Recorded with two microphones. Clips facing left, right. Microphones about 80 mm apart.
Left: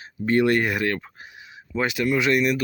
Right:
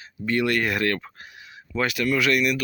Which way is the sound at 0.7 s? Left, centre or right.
Centre.